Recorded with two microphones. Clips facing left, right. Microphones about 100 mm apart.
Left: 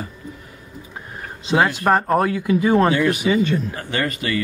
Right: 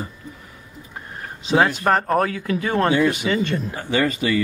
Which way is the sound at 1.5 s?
5° left (ahead or behind).